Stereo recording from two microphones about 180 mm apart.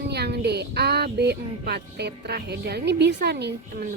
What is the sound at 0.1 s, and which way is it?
Child singing, 65° right (ahead or behind).